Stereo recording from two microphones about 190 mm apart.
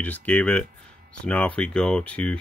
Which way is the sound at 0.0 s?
10° left (ahead or behind).